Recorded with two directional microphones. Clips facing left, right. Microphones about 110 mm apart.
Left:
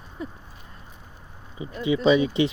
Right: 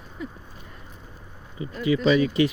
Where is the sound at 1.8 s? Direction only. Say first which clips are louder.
Left 1 dB; 25° left (ahead or behind).